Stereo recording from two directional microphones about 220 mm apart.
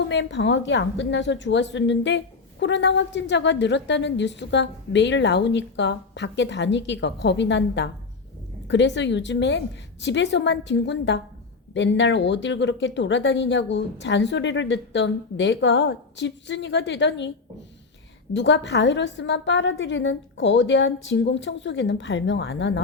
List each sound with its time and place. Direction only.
0.1 s a woman's voice: 55° left (ahead or behind)
18.3 s speech: 55° left (ahead or behind)